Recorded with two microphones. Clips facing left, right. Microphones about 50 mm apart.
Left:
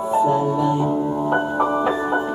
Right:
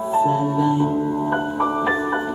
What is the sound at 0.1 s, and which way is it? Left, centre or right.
Music, left.